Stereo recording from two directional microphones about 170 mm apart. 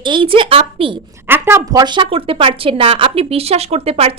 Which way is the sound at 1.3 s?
15° right (ahead or behind).